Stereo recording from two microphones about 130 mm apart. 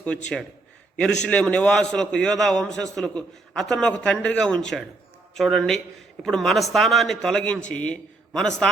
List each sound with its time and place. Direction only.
0.9 s a man's voice: 5° left (ahead or behind)